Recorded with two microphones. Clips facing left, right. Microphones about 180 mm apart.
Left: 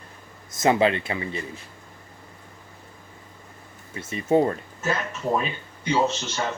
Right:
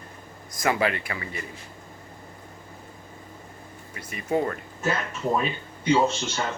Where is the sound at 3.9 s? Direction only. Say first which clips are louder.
Left 5 dB; 25° left (ahead or behind).